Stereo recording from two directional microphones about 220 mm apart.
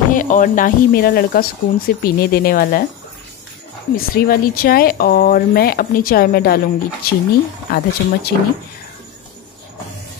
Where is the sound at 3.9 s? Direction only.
45° left (ahead or behind).